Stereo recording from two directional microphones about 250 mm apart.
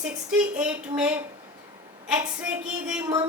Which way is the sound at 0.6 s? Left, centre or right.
Centre.